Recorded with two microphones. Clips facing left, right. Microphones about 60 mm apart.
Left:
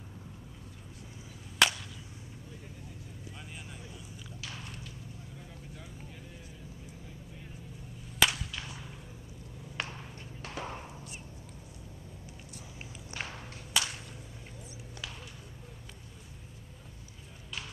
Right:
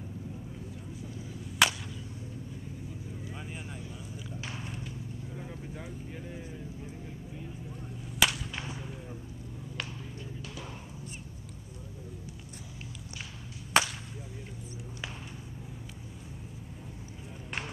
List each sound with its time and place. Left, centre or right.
1.6 s a sound: centre
3.3 s vehicle: right
4.4 s horse: right
5.4 s vehicle: right
8.2 s whip: centre
9.8 s a sound: left
10.4 s music: left
13.7 s whip: right
17.5 s run: right